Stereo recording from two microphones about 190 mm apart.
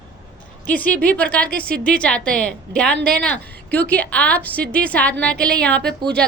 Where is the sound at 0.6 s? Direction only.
5° left (ahead or behind).